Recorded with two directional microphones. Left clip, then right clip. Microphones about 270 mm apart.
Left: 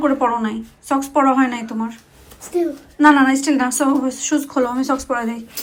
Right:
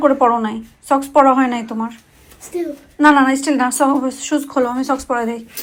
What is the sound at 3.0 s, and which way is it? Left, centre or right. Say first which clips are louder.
A woman's voice: right 1 dB; centre.